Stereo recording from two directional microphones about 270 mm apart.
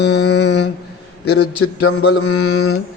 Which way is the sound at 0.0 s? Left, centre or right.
Left.